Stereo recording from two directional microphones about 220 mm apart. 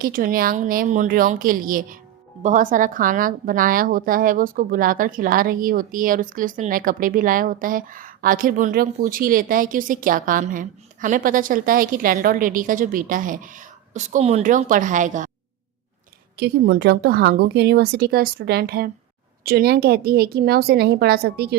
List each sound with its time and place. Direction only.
0.0 s a woman's voice: 40° right (ahead or behind)
16.4 s a woman's voice: 45° right (ahead or behind)